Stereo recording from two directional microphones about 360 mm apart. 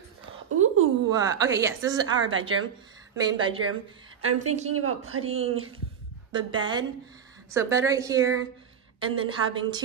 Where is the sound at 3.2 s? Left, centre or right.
Centre.